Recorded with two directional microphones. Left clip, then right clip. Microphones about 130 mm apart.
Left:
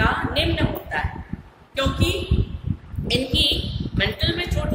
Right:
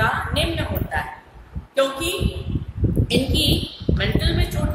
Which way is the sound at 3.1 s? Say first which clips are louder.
Left 1 dB; 20° right (ahead or behind).